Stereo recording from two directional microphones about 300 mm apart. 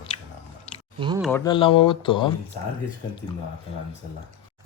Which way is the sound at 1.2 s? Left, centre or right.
Centre.